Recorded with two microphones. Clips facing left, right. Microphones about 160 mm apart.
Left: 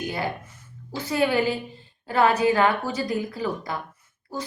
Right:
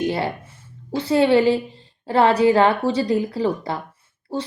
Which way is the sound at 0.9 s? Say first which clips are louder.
Right 7 dB; 30° right (ahead or behind).